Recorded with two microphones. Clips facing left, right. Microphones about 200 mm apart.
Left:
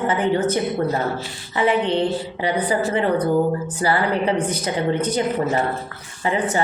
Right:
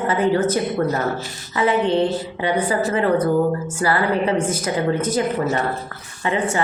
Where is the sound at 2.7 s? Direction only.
40° right (ahead or behind).